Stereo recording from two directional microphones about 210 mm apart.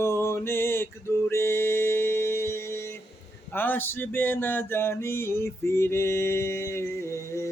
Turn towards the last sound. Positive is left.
turn(degrees=15)  # may be behind; listen again after turning